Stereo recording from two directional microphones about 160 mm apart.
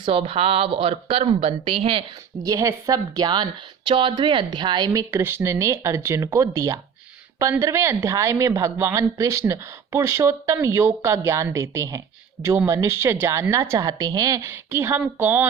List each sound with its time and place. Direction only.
0.0 s speech: 35° right (ahead or behind)
2.4 s a woman's voice: 20° right (ahead or behind)